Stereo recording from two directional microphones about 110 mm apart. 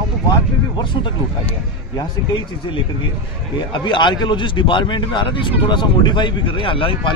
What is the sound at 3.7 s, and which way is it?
Speech, 45° left (ahead or behind).